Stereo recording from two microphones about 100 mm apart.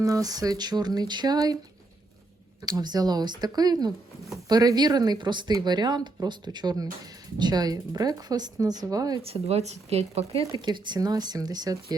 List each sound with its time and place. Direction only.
0.0 s speech: 35° right (ahead or behind)
2.6 s speech: 40° right (ahead or behind)
9.2 s speech: 90° right
10.5 s speech: 45° right (ahead or behind)